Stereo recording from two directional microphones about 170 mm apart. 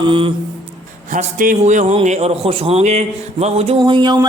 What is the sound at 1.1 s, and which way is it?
A man's voice, 50° right (ahead or behind).